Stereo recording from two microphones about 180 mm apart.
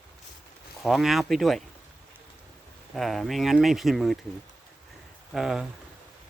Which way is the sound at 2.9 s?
Centre (ahead or behind).